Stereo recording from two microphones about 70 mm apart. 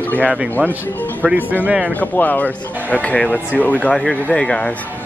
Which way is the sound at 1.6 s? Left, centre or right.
Centre.